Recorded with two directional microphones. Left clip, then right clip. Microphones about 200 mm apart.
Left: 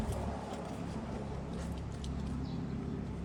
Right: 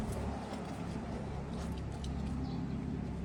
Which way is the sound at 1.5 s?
Centre (ahead or behind).